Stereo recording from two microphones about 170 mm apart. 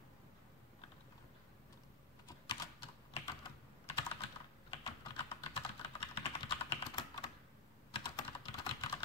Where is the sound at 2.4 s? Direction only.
30° left (ahead or behind).